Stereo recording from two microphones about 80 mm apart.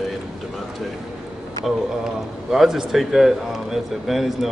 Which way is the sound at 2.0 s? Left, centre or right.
Centre.